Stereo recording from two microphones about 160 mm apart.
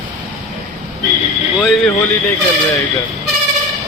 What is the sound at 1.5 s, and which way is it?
Speech, centre (ahead or behind).